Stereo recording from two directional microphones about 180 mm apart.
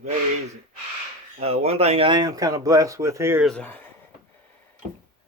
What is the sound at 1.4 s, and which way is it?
Speech, 35° right (ahead or behind).